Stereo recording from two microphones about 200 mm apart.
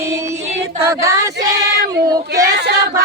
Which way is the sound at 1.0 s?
15° right (ahead or behind).